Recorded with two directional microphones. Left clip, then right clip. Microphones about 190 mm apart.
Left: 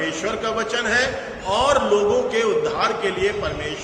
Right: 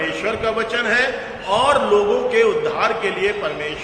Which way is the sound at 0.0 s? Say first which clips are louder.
Right 3 dB; 20° left (ahead or behind).